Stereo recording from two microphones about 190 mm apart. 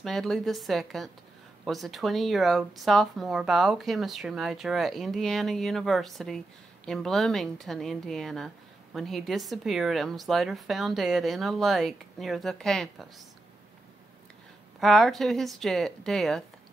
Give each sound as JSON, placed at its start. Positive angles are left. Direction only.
{"t": 0.0, "sound": "speech", "side_deg": 0}
{"t": 14.8, "sound": "speech", "side_deg": 0}